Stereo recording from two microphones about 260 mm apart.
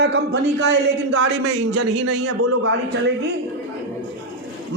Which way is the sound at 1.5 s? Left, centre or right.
Right.